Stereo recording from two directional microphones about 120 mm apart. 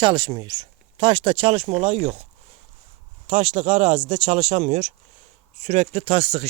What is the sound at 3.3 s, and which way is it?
Speech, 60° right (ahead or behind).